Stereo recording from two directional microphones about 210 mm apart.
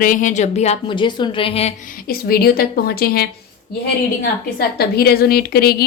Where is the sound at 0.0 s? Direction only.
40° left (ahead or behind).